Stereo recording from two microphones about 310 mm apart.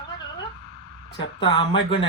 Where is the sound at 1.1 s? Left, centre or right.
Centre.